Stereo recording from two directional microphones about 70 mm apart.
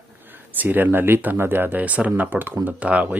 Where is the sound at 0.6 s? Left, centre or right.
Right.